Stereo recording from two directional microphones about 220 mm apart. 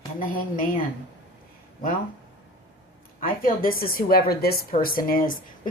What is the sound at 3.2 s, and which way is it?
A woman's voice, 40° left (ahead or behind).